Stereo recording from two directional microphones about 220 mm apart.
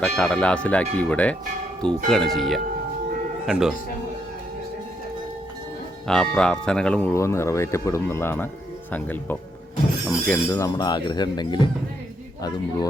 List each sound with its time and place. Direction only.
0.0 s speech: 5° left (ahead or behind)
6.1 s speech: 5° left (ahead or behind); by 11.7 s 20° left (ahead or behind)